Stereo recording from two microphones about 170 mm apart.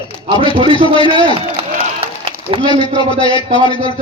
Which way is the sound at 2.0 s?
30° right (ahead or behind).